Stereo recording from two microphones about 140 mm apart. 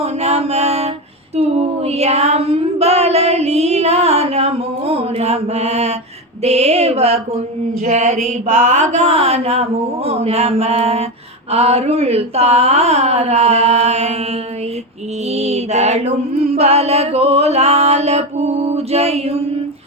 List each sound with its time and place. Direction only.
0.0 s mantra: 50° right (ahead or behind)
1.4 s female singing: 50° right (ahead or behind)
15.4 s female singing: 50° right (ahead or behind)